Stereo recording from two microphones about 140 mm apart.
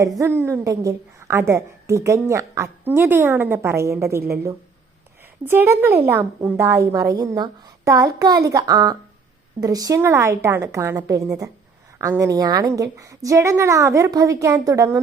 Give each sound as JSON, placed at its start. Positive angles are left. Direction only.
{"t": 0.2, "sound": "a woman's voice", "side_deg": -15}
{"t": 5.5, "sound": "a woman's voice", "side_deg": -15}